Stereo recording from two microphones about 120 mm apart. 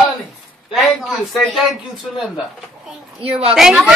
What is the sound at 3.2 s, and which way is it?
Speech, 55° right (ahead or behind).